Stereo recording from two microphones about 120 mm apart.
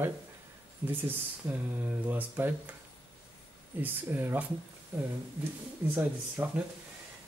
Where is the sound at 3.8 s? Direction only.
15° right (ahead or behind).